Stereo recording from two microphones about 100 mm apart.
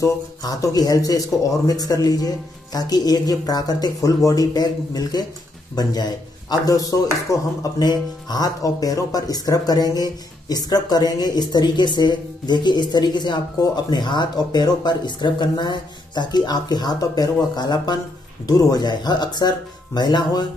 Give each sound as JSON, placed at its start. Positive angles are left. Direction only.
{"t": 0.0, "sound": "speech", "side_deg": 35}